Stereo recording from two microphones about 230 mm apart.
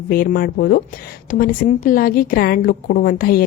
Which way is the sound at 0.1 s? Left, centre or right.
Left.